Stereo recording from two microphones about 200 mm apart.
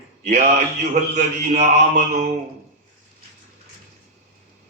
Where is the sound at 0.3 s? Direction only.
35° right (ahead or behind).